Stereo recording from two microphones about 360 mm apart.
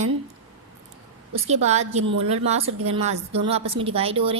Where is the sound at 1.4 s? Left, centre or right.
Centre.